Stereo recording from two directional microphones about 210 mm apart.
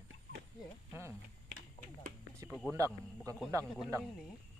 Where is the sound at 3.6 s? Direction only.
Centre (ahead or behind).